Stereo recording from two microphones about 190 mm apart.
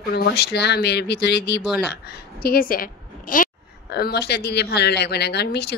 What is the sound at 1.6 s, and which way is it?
Speech, centre (ahead or behind).